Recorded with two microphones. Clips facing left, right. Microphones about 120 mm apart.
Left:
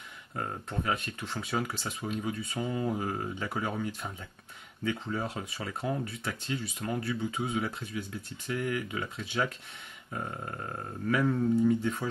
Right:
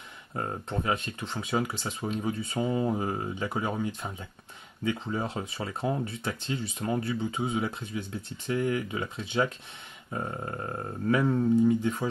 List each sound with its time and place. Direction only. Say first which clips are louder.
0.3 s speech: right 3 dB; 25° right (ahead or behind)
2.0 s speech: right 3 dB; 30° right (ahead or behind)